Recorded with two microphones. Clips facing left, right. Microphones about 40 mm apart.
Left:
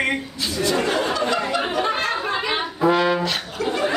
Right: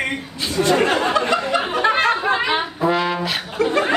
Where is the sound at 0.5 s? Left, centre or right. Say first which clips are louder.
Right 4 dB; right.